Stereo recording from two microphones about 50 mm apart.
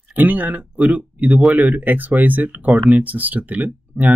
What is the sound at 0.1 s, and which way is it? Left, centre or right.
Speech, right.